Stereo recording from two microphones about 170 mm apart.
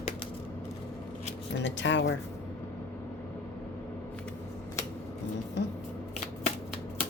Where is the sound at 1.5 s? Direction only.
90° left.